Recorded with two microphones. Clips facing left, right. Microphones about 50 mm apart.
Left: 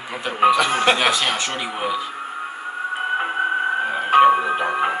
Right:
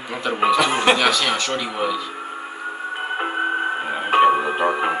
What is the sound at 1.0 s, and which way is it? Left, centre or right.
Speech, left.